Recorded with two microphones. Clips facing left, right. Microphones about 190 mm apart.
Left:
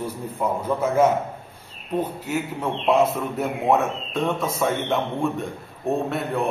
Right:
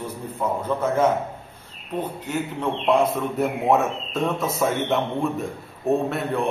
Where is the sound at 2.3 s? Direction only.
5° left (ahead or behind).